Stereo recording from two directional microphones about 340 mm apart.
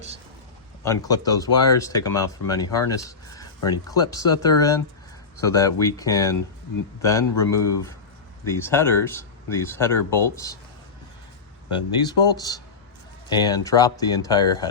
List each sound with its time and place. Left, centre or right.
0.9 s speech: centre
12.0 s speech: centre